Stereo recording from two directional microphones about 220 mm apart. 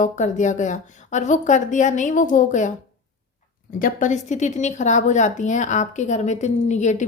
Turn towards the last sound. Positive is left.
turn(degrees=30)  # may be behind; listen again after turning